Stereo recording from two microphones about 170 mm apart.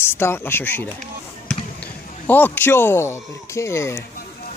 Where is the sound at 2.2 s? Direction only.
10° left (ahead or behind).